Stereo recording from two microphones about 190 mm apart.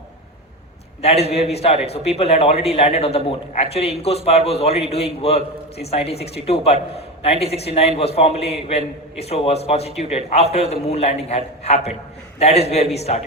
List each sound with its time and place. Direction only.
1.0 s a man's voice: 30° left (ahead or behind)